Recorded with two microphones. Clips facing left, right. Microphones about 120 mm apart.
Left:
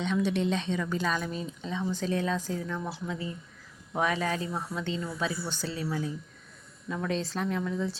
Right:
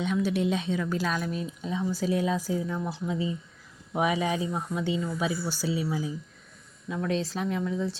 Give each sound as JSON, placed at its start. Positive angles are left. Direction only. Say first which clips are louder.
{"t": 0.0, "sound": "speech", "louder": "right 1 dB", "side_deg": -5}